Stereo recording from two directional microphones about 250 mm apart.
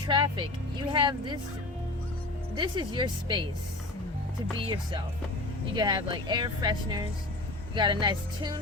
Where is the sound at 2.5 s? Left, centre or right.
Centre.